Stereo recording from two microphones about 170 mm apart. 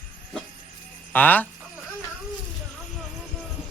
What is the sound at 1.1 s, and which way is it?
Speech, 10° left (ahead or behind).